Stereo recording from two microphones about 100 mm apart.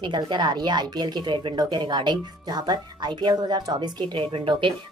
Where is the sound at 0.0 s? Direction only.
50° right (ahead or behind).